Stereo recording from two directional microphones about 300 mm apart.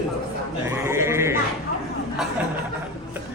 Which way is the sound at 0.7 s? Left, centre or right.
Centre.